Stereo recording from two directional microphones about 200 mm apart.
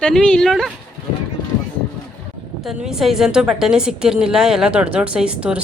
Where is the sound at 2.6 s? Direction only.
Centre (ahead or behind).